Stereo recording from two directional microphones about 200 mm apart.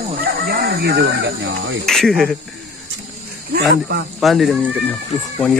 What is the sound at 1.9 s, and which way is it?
Speech, centre (ahead or behind).